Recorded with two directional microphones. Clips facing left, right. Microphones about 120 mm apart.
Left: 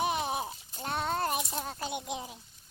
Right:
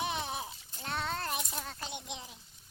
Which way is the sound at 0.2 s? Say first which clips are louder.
Left 5 dB; 50° left (ahead or behind).